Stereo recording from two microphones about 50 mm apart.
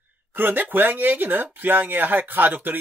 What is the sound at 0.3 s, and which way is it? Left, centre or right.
Speech, right.